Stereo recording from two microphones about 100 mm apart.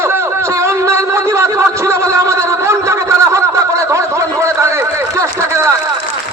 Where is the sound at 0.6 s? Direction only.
30° right (ahead or behind).